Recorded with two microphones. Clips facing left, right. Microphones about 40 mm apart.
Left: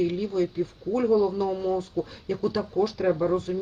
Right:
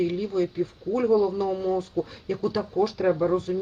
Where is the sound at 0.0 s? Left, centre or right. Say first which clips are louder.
Even; centre.